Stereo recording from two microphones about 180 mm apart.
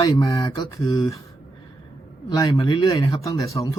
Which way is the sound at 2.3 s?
20° left (ahead or behind).